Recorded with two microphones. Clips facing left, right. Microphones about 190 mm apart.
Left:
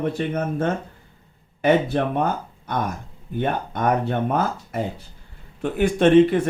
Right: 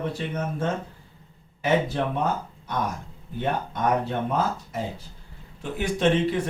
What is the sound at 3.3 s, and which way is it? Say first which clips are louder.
Speech: left 3 dB; 60° left (ahead or behind).